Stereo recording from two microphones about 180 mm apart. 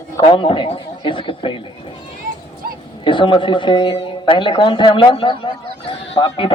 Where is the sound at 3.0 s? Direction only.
30° left (ahead or behind).